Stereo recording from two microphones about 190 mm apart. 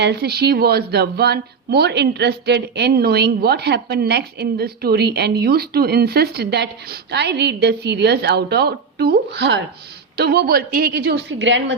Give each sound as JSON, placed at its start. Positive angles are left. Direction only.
{"t": 0.0, "sound": "speech", "side_deg": -60}